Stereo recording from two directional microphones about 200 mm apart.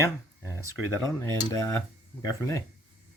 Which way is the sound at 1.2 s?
15° left (ahead or behind).